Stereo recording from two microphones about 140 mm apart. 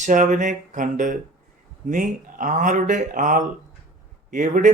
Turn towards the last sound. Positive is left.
turn(degrees=-70)  # may be behind; listen again after turning